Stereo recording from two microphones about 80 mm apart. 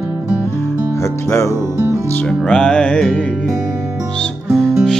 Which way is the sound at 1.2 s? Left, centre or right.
Left.